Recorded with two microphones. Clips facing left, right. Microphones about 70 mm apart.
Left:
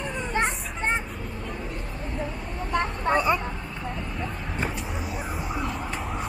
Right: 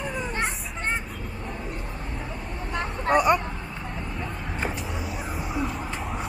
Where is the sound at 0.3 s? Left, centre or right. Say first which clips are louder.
Left 3 dB; centre.